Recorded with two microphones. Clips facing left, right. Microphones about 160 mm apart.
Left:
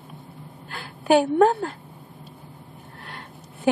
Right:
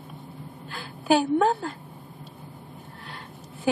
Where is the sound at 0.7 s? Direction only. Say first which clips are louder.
Left 3 dB; 60° left (ahead or behind).